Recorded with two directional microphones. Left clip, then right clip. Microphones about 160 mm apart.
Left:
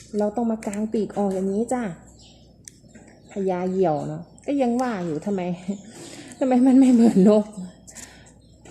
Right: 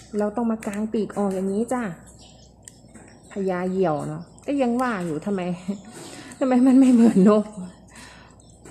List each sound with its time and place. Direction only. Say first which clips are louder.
0.3 s a woman's voice: even; 15° left (ahead or behind)
3.2 s a woman's voice: left 1 dB; 15° left (ahead or behind)